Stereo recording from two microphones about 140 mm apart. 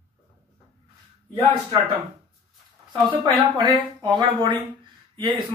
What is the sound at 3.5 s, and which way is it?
Speech, 35° right (ahead or behind).